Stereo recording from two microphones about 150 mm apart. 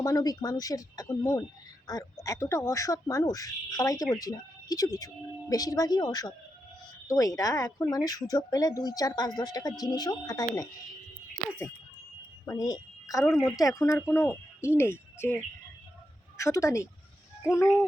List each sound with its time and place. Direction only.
0.0 s speech: 25° left (ahead or behind)
12.5 s a woman's voice: 25° left (ahead or behind)
16.4 s speech: 20° left (ahead or behind)